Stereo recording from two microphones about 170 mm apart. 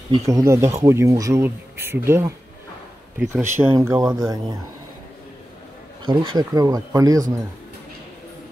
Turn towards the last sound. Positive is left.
turn(degrees=-20)  # may be behind; listen again after turning